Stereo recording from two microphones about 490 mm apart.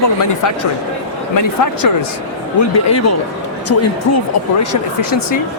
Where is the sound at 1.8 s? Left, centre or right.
Left.